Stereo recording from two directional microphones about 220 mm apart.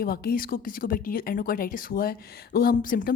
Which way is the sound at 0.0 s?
45° left (ahead or behind).